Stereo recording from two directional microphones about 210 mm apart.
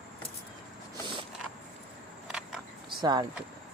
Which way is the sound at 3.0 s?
20° right (ahead or behind).